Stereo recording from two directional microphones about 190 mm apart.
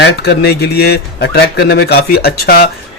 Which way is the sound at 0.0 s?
60° left (ahead or behind).